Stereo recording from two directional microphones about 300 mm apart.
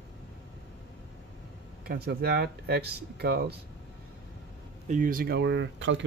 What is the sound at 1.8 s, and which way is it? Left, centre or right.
Speech, right.